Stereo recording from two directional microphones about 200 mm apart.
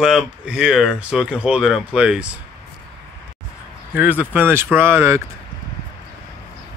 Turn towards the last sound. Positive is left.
turn(degrees=-10)  # may be behind; listen again after turning